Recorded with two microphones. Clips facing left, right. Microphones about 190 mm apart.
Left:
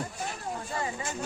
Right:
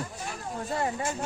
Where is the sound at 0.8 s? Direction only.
55° right (ahead or behind).